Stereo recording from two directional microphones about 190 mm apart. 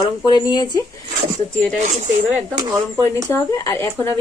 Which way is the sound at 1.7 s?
40° right (ahead or behind).